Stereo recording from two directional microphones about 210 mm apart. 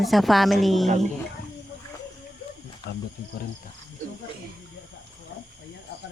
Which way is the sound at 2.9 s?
50° left (ahead or behind).